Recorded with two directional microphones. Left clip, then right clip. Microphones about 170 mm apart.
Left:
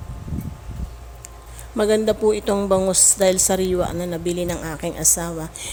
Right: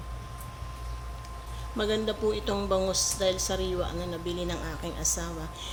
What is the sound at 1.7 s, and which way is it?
A woman's voice, 45° left (ahead or behind).